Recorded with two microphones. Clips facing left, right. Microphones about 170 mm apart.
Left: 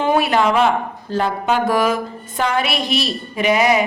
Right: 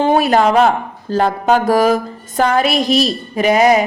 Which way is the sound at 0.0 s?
35° right (ahead or behind).